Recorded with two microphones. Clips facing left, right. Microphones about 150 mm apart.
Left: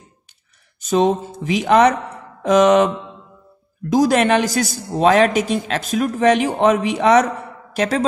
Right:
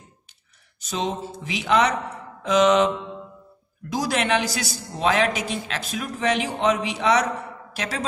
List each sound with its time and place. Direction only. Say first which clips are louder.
0.7 s a woman's voice: left 11 dB; 50° left (ahead or behind)
3.9 s a woman's voice: left 8 dB; 45° left (ahead or behind)